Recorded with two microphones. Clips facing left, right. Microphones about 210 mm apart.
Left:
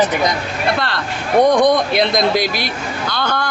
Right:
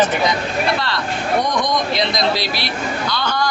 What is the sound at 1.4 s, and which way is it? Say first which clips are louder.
A man's voice: left 8 dB; 55° left (ahead or behind).